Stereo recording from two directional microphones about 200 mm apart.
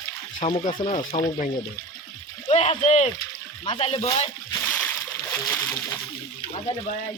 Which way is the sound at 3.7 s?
30° left (ahead or behind).